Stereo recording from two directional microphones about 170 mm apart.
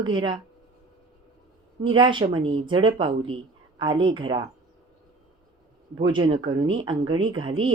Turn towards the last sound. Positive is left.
turn(degrees=-30)  # may be behind; listen again after turning